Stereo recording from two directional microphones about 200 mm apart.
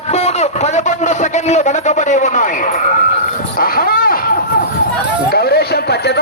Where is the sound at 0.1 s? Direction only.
35° left (ahead or behind).